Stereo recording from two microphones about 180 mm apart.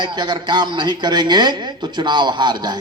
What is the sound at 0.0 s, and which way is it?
Speech, 25° right (ahead or behind).